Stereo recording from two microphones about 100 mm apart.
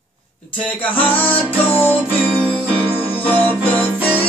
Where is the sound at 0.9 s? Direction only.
15° left (ahead or behind).